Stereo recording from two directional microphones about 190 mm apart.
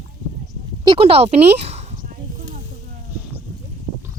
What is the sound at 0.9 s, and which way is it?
Speech, 30° right (ahead or behind).